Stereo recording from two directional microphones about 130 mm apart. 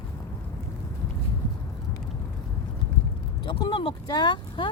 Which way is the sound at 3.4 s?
35° left (ahead or behind).